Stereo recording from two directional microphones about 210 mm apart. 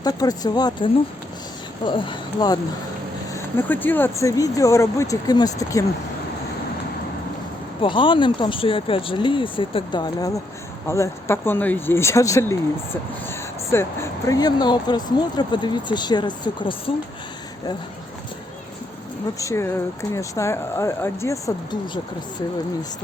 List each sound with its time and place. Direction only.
0.0 s speech: 20° left (ahead or behind)
3.3 s speech: 10° left (ahead or behind)
7.8 s speech: 25° left (ahead or behind)
19.4 s speech: 15° left (ahead or behind)